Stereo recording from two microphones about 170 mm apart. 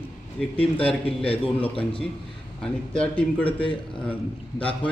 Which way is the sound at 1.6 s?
30° left (ahead or behind).